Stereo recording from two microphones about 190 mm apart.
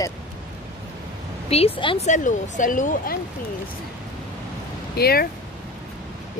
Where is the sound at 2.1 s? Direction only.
40° left (ahead or behind).